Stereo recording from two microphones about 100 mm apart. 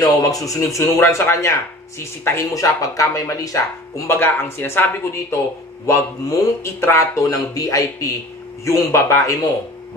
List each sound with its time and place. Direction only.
0.0 s speech: 35° left (ahead or behind)
4.1 s speech: 20° left (ahead or behind)